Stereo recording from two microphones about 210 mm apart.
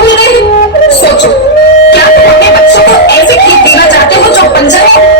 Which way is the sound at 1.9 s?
55° left (ahead or behind).